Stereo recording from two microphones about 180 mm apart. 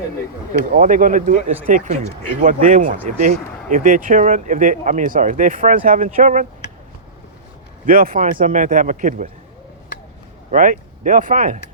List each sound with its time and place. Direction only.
0.7 s speech: 45° right (ahead or behind)
7.9 s speech: 50° right (ahead or behind)
10.5 s speech: 45° right (ahead or behind)